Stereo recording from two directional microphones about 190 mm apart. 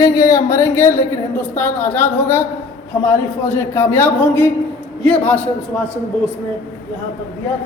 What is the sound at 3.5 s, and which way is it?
Speech, 10° left (ahead or behind).